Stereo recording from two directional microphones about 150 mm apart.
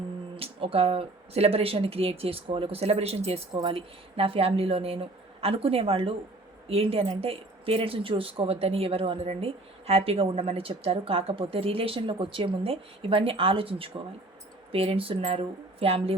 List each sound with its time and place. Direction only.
0.3 s speech: 40° right (ahead or behind)